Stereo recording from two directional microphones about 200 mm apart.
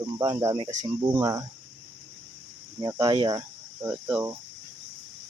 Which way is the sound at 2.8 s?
20° right (ahead or behind).